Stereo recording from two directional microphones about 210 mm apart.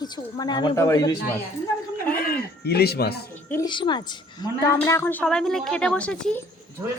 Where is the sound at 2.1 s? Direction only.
45° left (ahead or behind).